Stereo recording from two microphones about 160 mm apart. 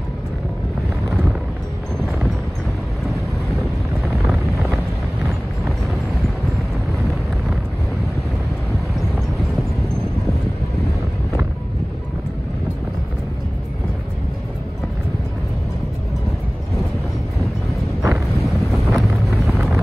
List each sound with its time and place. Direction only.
3.1 s vehicle: centre (ahead or behind)
18.0 s wind noise: 20° right (ahead or behind)
18.4 s wind noise: centre (ahead or behind)